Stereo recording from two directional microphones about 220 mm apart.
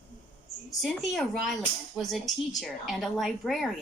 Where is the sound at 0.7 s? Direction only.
Centre (ahead or behind).